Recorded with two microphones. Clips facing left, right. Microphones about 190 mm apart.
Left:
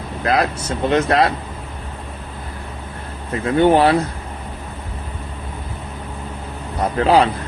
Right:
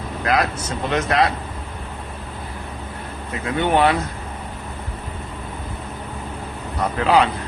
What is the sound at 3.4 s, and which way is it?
Speech, 35° left (ahead or behind).